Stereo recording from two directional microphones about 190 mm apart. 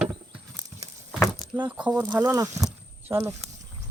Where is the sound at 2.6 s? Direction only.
15° right (ahead or behind).